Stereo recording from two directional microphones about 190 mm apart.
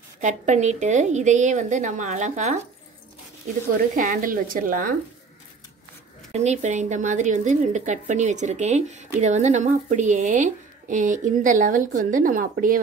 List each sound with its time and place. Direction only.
0.2 s a woman's voice: 40° right (ahead or behind)
3.9 s speech: 45° right (ahead or behind)
6.3 s a woman's voice: 35° right (ahead or behind)